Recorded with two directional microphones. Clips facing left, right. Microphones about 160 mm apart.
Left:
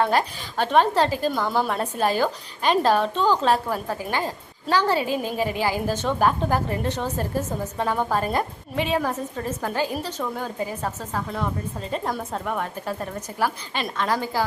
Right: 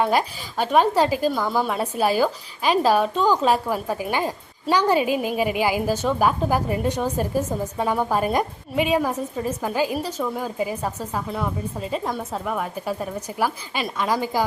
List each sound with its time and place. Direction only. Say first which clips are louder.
0.0 s a woman's voice: right 1 dB; 10° right (ahead or behind)